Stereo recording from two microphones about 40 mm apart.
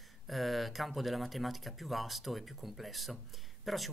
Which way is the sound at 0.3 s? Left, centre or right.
Centre.